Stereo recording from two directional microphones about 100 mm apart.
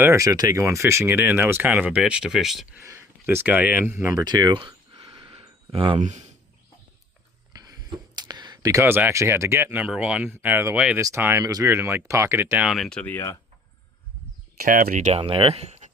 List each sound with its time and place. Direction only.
0.0 s speech: 30° right (ahead or behind); by 2.6 s 5° right (ahead or behind)
2.8 s speech: 25° right (ahead or behind); by 5.3 s 55° right (ahead or behind)
5.3 s a sound: 70° right (ahead or behind)
7.5 s a sound: 40° right (ahead or behind)
8.5 s speech: 30° right (ahead or behind)
9.8 s speech: 10° right (ahead or behind)
12.6 s speech: centre (ahead or behind)
13.1 s speech: 25° left (ahead or behind)
15.1 s speech: 70° right (ahead or behind); by 15.7 s 90° right